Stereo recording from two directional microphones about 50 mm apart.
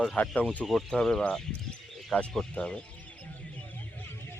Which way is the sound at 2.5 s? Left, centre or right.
Left.